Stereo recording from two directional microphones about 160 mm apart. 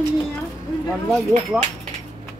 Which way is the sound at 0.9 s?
Centre (ahead or behind).